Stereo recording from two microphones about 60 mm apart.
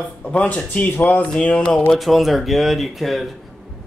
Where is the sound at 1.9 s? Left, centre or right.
Centre.